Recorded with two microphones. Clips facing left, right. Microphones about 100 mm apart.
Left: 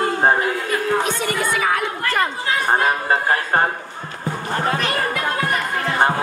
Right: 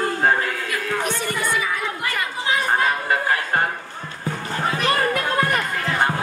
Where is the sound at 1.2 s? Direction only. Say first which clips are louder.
Left 3 dB; 55° left (ahead or behind).